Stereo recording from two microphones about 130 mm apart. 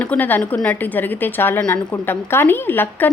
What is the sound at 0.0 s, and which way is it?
A woman's voice, 10° left (ahead or behind).